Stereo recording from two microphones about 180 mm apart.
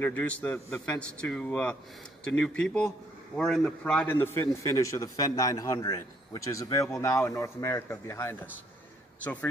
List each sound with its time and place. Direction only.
0.0 s a man's voice: 10° left (ahead or behind)